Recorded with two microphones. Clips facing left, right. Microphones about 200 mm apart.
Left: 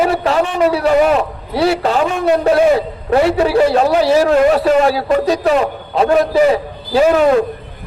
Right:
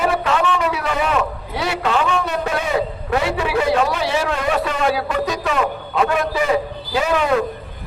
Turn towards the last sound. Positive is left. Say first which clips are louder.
# left 8 dB
turn(degrees=40)  # may be behind; listen again after turning